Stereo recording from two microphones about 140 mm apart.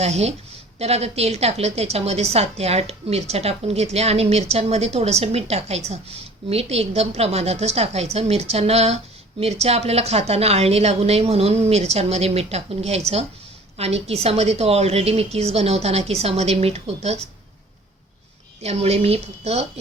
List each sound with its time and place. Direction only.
0.0 s a woman's voice: 50° right (ahead or behind)
18.6 s a woman's voice: 50° right (ahead or behind)